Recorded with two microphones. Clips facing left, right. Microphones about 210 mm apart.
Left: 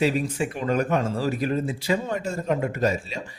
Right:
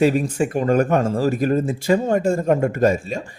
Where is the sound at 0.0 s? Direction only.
45° right (ahead or behind).